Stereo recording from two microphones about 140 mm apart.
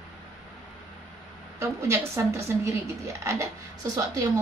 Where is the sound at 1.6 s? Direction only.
15° right (ahead or behind).